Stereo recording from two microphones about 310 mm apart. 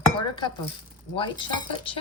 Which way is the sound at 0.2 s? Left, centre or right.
Centre.